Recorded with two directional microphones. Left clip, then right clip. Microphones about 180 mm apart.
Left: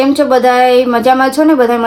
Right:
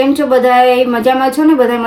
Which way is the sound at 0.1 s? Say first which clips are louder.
Left 1 dB; 25° left (ahead or behind).